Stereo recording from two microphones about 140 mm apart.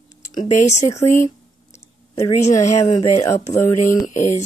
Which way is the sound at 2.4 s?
50° left (ahead or behind).